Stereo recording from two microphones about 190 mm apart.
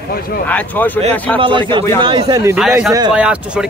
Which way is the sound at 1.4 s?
25° right (ahead or behind).